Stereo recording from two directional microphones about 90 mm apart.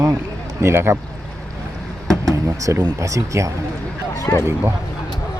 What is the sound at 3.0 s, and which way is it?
Speech, 35° right (ahead or behind).